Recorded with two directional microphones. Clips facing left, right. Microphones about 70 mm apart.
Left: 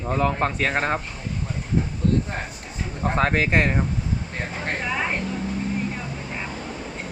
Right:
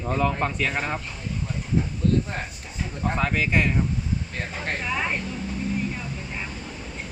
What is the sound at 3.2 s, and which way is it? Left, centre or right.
Speech, left.